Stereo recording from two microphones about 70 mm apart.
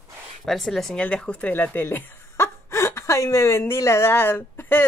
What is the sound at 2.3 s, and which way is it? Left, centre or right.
Speech, left.